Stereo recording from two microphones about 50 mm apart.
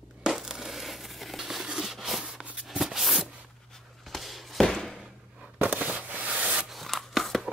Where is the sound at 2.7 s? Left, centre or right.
Centre.